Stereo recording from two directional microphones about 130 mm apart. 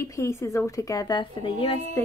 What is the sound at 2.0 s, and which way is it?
Speech, 20° left (ahead or behind).